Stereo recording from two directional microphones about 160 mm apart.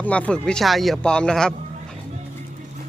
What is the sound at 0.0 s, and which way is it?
Speech, 10° left (ahead or behind).